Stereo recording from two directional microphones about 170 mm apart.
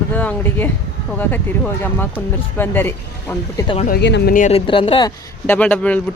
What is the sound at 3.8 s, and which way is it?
Speech, 75° left (ahead or behind).